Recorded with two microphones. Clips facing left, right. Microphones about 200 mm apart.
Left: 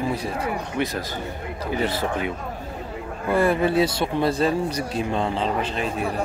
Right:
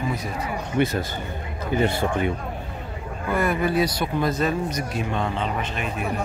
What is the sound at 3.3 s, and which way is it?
Speech, 30° left (ahead or behind).